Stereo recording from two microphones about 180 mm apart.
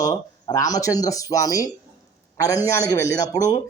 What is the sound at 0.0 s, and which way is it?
A man's voice, 20° left (ahead or behind).